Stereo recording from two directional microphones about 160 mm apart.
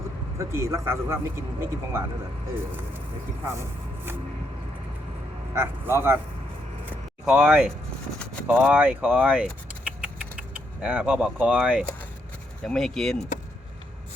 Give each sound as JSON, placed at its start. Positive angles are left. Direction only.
{"t": 0.3, "sound": "speech", "side_deg": -20}
{"t": 3.4, "sound": "speech", "side_deg": -15}
{"t": 5.5, "sound": "speech", "side_deg": -15}
{"t": 6.9, "sound": "a sound", "side_deg": -5}
{"t": 8.4, "sound": "speech", "side_deg": -10}
{"t": 10.5, "sound": "speech", "side_deg": -10}